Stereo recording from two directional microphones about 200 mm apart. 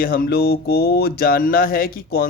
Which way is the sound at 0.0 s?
45° left (ahead or behind).